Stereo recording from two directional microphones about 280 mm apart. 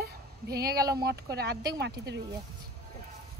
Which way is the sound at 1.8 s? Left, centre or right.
Right.